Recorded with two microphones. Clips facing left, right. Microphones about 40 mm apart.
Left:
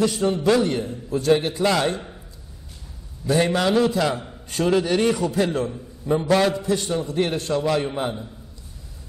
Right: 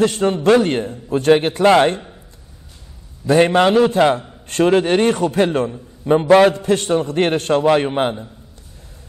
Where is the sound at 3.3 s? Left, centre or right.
Right.